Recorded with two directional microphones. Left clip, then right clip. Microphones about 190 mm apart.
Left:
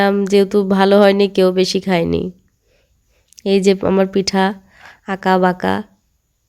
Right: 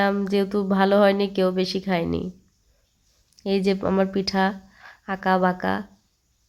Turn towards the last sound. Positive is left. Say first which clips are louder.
# left 7 dB
turn(degrees=35)  # may be behind; listen again after turning